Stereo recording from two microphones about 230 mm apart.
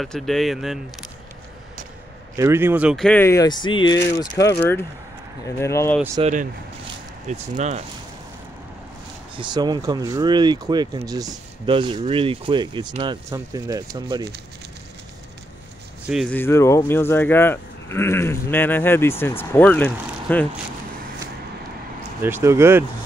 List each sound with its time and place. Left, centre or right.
0.0 s speech: centre
2.3 s speech: centre
5.6 s speech: centre
6.2 s speech: right
9.4 s speech: centre
16.1 s speech: centre
22.2 s speech: centre